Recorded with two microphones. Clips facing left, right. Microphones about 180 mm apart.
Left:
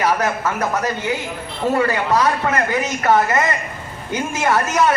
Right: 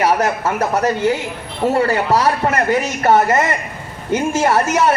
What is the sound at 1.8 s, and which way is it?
A woman's voice, 35° right (ahead or behind).